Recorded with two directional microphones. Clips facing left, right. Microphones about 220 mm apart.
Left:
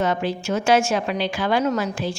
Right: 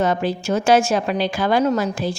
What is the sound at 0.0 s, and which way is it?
A woman's voice, 40° right (ahead or behind).